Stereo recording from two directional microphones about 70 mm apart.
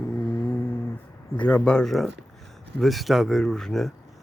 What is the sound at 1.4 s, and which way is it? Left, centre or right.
Speech, centre.